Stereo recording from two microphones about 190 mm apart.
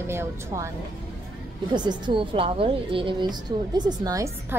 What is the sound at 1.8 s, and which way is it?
A woman's voice, 25° right (ahead or behind).